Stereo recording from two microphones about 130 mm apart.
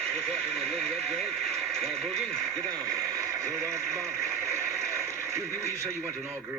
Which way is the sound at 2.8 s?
20° right (ahead or behind).